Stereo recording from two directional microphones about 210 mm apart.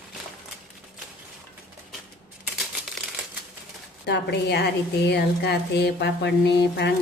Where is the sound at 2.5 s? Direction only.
Centre (ahead or behind).